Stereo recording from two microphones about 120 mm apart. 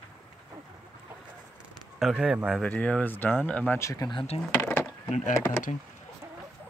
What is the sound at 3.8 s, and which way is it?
Speech, 25° left (ahead or behind).